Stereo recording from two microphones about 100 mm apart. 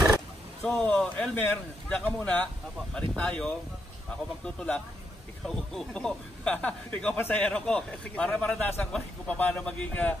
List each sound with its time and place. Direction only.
0.7 s a man's voice: 10° left (ahead or behind)
4.6 s a man's voice: 10° left (ahead or behind)